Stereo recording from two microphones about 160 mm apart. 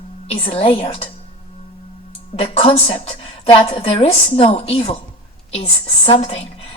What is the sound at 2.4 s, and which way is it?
A woman's voice, 40° left (ahead or behind).